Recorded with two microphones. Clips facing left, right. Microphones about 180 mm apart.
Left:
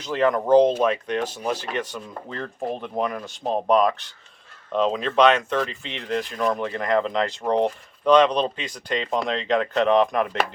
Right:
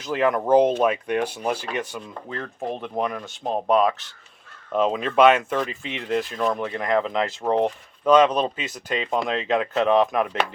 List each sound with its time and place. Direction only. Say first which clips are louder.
0.0 s speech: even; 5° right (ahead or behind)